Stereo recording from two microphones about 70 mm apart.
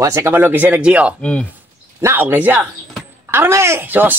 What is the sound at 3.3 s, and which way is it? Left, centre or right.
Speech, right.